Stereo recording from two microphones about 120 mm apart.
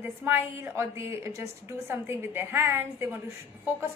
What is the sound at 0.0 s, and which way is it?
A woman's voice, 20° right (ahead or behind).